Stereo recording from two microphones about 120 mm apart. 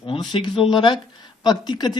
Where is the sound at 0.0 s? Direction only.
45° left (ahead or behind).